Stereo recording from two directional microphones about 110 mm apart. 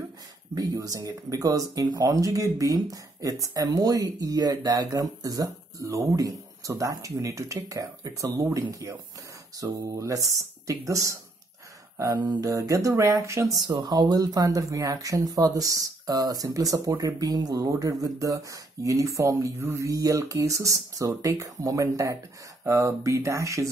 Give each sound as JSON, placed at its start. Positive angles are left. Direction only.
{"t": 0.6, "sound": "speech", "side_deg": -30}